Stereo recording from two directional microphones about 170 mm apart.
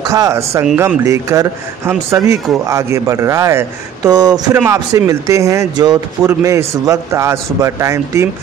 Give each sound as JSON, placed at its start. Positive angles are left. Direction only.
{"t": 0.0, "sound": "speech", "side_deg": -20}